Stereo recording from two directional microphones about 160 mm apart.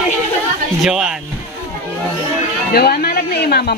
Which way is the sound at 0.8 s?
5° right (ahead or behind).